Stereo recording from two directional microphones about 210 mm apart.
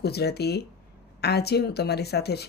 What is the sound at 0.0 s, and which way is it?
Speech, 50° left (ahead or behind).